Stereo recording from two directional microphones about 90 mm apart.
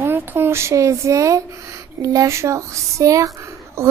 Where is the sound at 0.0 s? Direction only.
25° right (ahead or behind).